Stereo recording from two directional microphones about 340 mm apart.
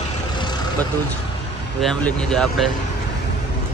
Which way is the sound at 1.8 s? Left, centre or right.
Centre.